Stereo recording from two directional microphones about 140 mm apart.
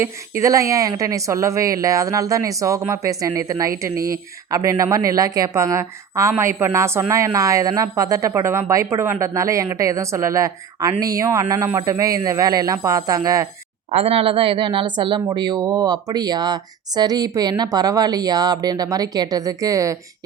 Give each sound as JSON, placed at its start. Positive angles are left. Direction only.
{"t": 0.0, "sound": "a woman's voice", "side_deg": -20}
{"t": 13.9, "sound": "a woman's voice", "side_deg": -45}